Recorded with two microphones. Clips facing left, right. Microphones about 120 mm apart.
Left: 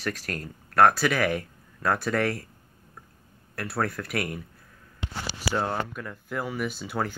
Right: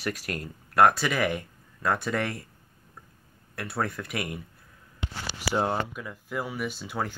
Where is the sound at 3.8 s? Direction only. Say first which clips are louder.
Left 3 dB; centre (ahead or behind).